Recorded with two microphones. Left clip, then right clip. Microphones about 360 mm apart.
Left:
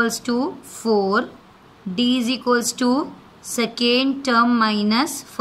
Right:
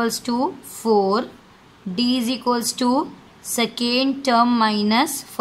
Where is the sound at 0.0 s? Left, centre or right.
Centre.